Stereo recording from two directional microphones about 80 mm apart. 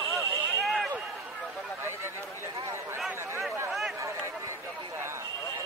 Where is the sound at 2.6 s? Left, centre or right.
Right.